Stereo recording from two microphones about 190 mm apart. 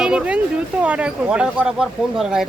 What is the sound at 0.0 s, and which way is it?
Speech, 5° right (ahead or behind).